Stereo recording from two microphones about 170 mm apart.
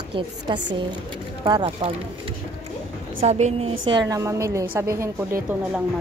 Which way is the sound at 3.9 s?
20° right (ahead or behind).